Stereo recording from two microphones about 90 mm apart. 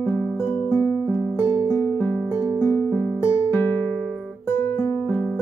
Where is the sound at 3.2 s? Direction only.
30° left (ahead or behind).